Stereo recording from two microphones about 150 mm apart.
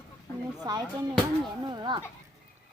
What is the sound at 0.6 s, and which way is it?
Speech, 25° right (ahead or behind).